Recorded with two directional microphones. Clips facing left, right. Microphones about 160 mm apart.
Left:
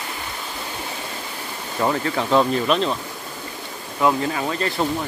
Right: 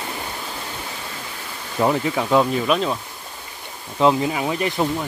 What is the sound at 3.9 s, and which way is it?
Speech, 20° right (ahead or behind).